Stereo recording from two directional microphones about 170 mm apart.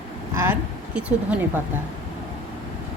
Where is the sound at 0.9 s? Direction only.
5° right (ahead or behind).